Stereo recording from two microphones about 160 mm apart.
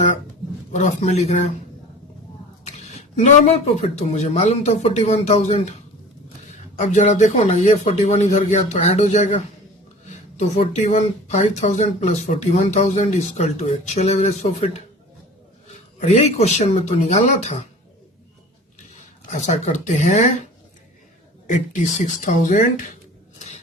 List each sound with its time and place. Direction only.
0.7 s speech: 45° left (ahead or behind)
2.6 s speech: 45° left (ahead or behind)
6.7 s speech: 50° left (ahead or behind)
19.3 s speech: 45° left (ahead or behind)
21.4 s speech: 50° left (ahead or behind)